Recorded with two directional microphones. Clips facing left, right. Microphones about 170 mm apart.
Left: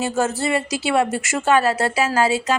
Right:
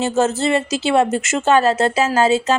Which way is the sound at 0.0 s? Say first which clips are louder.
Right 4 dB; 25° right (ahead or behind).